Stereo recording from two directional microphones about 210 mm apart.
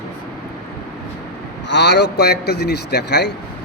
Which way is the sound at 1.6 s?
55° left (ahead or behind).